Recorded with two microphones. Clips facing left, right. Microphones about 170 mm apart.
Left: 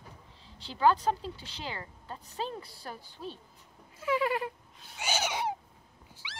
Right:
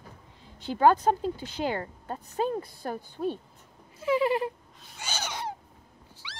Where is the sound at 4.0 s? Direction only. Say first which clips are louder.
Right 5 dB; 25° right (ahead or behind).